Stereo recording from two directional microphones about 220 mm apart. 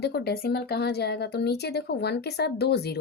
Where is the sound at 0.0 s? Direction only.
45° left (ahead or behind).